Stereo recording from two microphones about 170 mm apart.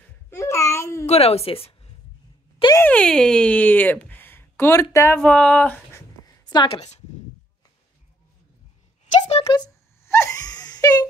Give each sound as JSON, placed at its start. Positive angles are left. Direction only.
{"t": 0.3, "sound": "babbling", "side_deg": 15}
{"t": 1.0, "sound": "a woman's voice", "side_deg": 40}
{"t": 2.8, "sound": "speech", "side_deg": 5}
{"t": 6.5, "sound": "a woman's voice", "side_deg": 30}
{"t": 9.2, "sound": "a sound", "side_deg": 35}
{"t": 10.0, "sound": "wail", "side_deg": 15}